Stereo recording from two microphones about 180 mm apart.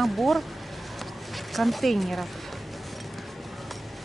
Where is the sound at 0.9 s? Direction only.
Centre (ahead or behind).